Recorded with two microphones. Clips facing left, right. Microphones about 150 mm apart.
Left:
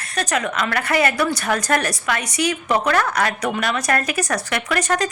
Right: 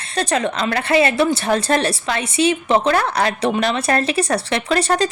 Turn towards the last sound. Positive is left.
turn(degrees=-30)  # may be behind; listen again after turning